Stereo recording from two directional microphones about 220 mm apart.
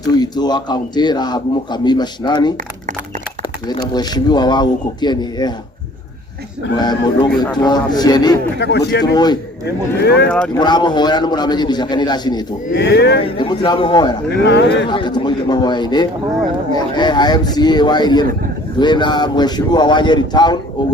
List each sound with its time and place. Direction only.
0.2 s a man's voice: 20° left (ahead or behind)
3.9 s a man's voice: 20° left (ahead or behind)
6.7 s a man's voice: 20° left (ahead or behind)
8.5 s a man's voice: 50° left (ahead or behind)
9.1 s a man's voice: 20° left (ahead or behind)
9.6 s a man's voice: 50° left (ahead or behind)
10.2 s speech: 5° left (ahead or behind)
10.6 s a man's voice: 20° left (ahead or behind)
12.7 s a man's voice: 50° left (ahead or behind)
13.2 s a man's voice: 25° left (ahead or behind)
14.3 s a man's voice: 50° left (ahead or behind)
14.8 s a man's voice: 20° left (ahead or behind)